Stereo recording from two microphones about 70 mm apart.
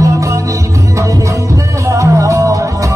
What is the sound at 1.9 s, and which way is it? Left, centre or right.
Music, right.